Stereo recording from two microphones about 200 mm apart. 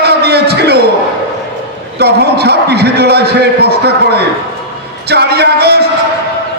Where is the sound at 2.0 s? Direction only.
55° right (ahead or behind).